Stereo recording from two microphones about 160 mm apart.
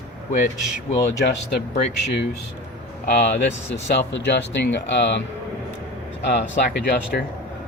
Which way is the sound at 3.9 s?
90° left.